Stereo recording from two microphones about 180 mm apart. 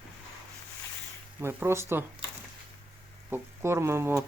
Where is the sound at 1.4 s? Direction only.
15° right (ahead or behind).